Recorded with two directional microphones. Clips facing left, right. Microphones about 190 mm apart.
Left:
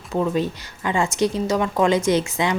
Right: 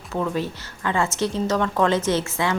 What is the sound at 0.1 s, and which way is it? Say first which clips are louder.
Speech: left 3 dB; 20° left (ahead or behind).